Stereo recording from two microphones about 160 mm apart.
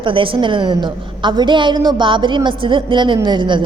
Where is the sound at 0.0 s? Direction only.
30° right (ahead or behind).